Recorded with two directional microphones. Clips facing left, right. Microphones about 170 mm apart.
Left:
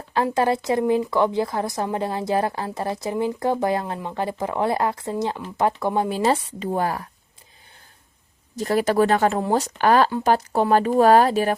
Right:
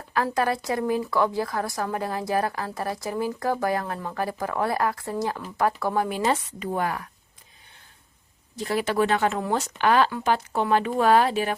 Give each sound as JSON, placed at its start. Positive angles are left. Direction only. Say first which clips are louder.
{"t": 0.3, "sound": "speech", "louder": "left 6 dB", "side_deg": 25}
{"t": 8.5, "sound": "speech", "louder": "left 5 dB", "side_deg": 40}